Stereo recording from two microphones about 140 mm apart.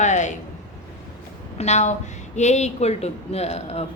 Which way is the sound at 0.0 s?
60° left (ahead or behind).